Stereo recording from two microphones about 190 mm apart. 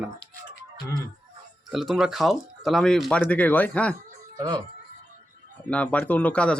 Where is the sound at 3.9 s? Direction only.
20° right (ahead or behind).